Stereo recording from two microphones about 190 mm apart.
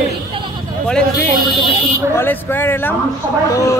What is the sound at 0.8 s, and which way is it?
A man's voice, 5° left (ahead or behind).